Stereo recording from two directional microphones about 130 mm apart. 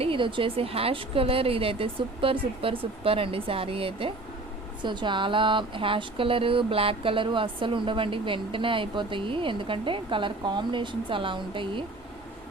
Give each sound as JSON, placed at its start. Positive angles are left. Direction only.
{"t": 0.0, "sound": "a woman's voice", "side_deg": -40}